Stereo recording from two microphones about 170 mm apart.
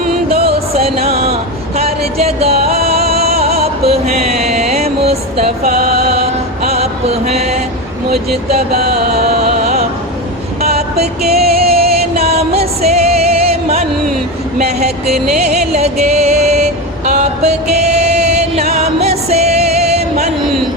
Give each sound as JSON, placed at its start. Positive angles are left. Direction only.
{"t": 0.9, "sound": "a sound", "side_deg": -35}
{"t": 2.6, "sound": "music", "side_deg": -65}
{"t": 4.3, "sound": "music", "side_deg": -40}
{"t": 6.7, "sound": "music", "side_deg": -40}
{"t": 8.1, "sound": "vehicle", "side_deg": -65}
{"t": 9.4, "sound": "music", "side_deg": -40}
{"t": 10.8, "sound": "music", "side_deg": -70}
{"t": 12.3, "sound": "music", "side_deg": -40}
{"t": 15.4, "sound": "music", "side_deg": -40}